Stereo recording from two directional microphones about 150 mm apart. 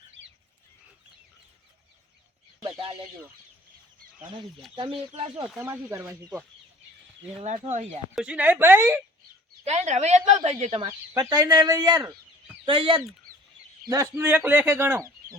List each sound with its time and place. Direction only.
2.6 s speech: 35° right (ahead or behind)
4.7 s speech: 35° right (ahead or behind)
5.5 s speech: 15° right (ahead or behind)
8.1 s speech: 5° right (ahead or behind)
9.6 s speech: 50° right (ahead or behind)
11.1 s speech: 20° right (ahead or behind)
13.8 s speech: 20° right (ahead or behind)